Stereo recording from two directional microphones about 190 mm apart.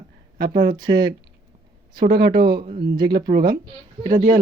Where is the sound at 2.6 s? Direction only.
25° right (ahead or behind).